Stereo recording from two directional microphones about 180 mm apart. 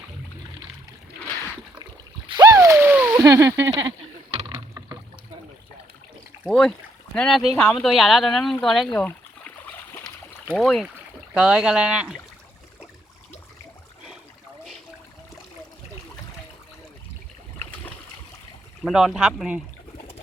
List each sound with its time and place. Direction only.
2.3 s a sound: 20° right (ahead or behind)
4.4 s rowboat: 30° right (ahead or behind)
6.5 s speech: 5° left (ahead or behind)
9.6 s a sound: 10° left (ahead or behind)
10.5 s speech: centre (ahead or behind)
18.9 s speech: centre (ahead or behind)